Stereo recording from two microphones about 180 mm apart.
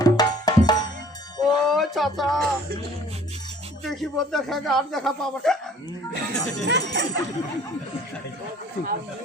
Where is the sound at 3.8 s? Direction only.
Centre (ahead or behind).